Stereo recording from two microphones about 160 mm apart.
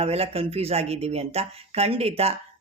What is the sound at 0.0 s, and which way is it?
Speech, 40° right (ahead or behind).